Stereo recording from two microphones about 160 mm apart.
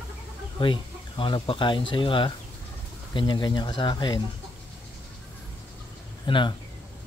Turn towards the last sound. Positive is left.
turn(degrees=30)  # may be behind; listen again after turning